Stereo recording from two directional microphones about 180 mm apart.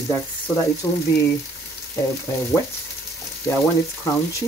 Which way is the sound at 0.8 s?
20° left (ahead or behind).